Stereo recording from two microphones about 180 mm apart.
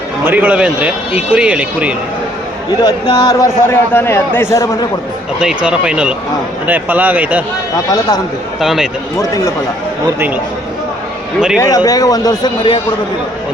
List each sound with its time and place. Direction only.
0.3 s speech: 10° right (ahead or behind)
2.8 s a man's voice: 20° left (ahead or behind)
5.6 s speech: 5° right (ahead or behind)
7.9 s a man's voice: 20° left (ahead or behind)
8.6 s speech: centre (ahead or behind)
10.2 s speech: 10° right (ahead or behind)
11.5 s a man's voice: 15° left (ahead or behind)